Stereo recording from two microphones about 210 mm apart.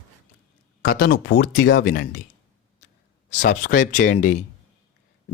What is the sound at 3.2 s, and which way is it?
Speech, 35° left (ahead or behind).